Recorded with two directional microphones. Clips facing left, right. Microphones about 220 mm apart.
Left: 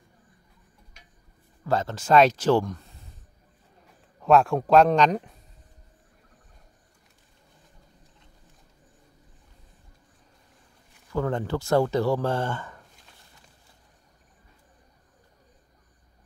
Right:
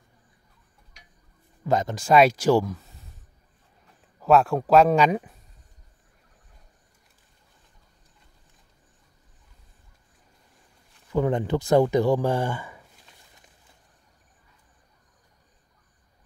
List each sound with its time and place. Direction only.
1.6 s speech: 15° right (ahead or behind)
4.2 s speech: centre (ahead or behind)
11.1 s speech: 15° right (ahead or behind)